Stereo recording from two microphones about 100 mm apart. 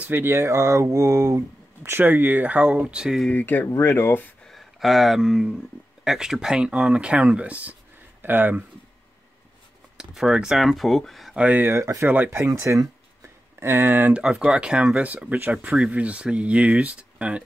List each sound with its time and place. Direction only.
0.0 s speech: 20° right (ahead or behind)
1.9 s speech: 20° right (ahead or behind)
3.3 s speech: 20° left (ahead or behind)
4.5 s speech: centre (ahead or behind); by 8.6 s 20° right (ahead or behind)
9.9 s speech: 5° right (ahead or behind)
11.3 s speech: 15° right (ahead or behind)
11.8 s speech: 35° right (ahead or behind)
14.2 s speech: 5° right (ahead or behind)